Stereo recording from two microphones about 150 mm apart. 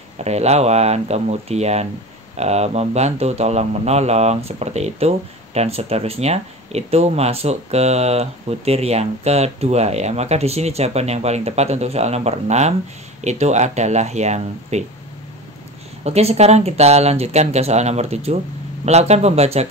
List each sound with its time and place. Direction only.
0.2 s speech: 45° right (ahead or behind)
16.0 s speech: 45° right (ahead or behind)